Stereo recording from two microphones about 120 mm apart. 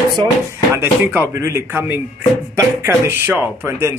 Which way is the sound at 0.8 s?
20° right (ahead or behind).